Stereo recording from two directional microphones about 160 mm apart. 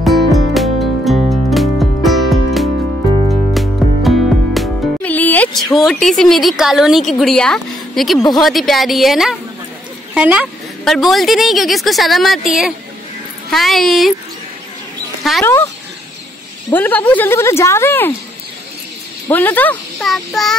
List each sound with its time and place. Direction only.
0.0 s music: centre (ahead or behind)
5.1 s music: 10° left (ahead or behind)
5.9 s a woman's voice: centre (ahead or behind)
15.4 s a woman's voice: 15° left (ahead or behind)
16.7 s a woman's voice: 10° left (ahead or behind)
19.3 s a woman's voice: 10° left (ahead or behind)